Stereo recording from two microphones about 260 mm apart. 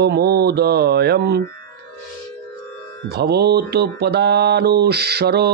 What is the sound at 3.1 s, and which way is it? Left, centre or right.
Speech, right.